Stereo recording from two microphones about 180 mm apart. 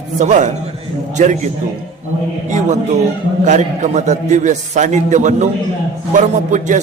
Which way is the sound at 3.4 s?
40° right (ahead or behind).